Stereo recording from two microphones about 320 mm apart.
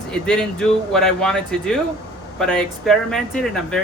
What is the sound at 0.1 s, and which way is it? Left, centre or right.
Speech, centre.